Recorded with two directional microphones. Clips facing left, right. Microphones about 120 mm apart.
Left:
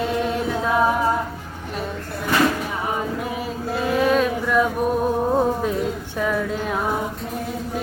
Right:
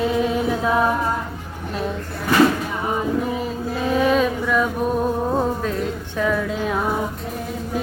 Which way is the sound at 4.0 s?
Centre (ahead or behind).